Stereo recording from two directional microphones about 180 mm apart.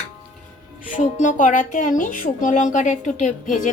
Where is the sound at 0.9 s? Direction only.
45° left (ahead or behind).